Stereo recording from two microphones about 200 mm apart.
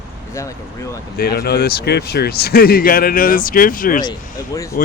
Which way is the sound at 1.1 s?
50° left (ahead or behind).